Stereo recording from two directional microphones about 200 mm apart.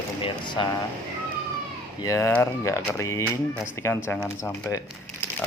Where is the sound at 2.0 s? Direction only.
15° left (ahead or behind).